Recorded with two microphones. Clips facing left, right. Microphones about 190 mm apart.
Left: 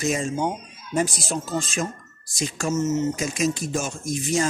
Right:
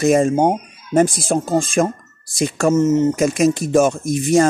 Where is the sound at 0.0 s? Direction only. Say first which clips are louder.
Right 10 dB; 55° right (ahead or behind).